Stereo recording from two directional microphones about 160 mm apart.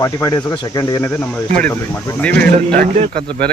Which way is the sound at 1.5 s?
10° left (ahead or behind).